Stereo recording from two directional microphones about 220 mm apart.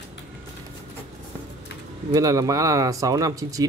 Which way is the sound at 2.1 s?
15° right (ahead or behind).